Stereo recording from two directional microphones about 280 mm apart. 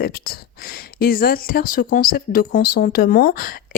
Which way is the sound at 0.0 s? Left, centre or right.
Left.